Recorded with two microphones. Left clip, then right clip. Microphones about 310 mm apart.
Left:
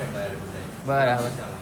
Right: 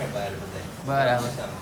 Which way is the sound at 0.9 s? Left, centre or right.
Centre.